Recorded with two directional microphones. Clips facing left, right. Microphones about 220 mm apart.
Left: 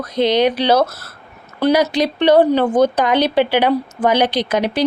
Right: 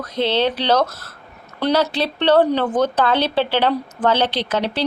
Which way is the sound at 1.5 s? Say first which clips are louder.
Left 4 dB; 5° left (ahead or behind).